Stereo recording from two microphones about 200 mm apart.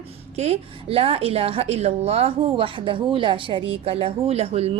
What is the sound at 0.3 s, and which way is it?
A woman's voice, 30° right (ahead or behind).